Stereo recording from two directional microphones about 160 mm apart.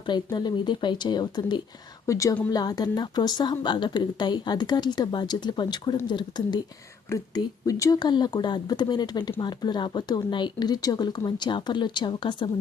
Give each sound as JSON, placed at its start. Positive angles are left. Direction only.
{"t": 0.3, "sound": "speech", "side_deg": 25}